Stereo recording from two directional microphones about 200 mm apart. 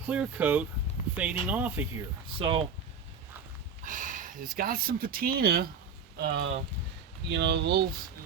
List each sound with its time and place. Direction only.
0.0 s speech: 5° right (ahead or behind)
2.4 s speech: 25° right (ahead or behind)
3.8 s speech: 40° right (ahead or behind); by 7.9 s 55° right (ahead or behind)